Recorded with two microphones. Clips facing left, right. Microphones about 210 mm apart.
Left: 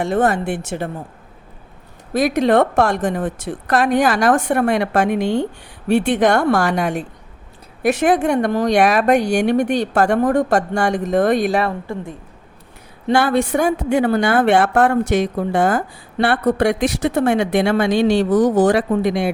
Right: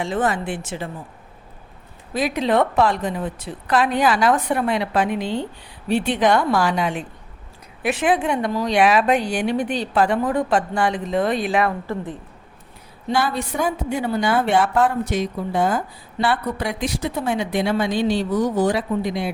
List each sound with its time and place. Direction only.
0.0 s speech: 60° left (ahead or behind)
2.1 s a woman's voice: 45° left (ahead or behind)
13.1 s a woman's voice: 75° left (ahead or behind)